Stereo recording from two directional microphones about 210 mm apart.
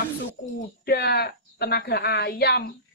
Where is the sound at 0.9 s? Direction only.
50° left (ahead or behind).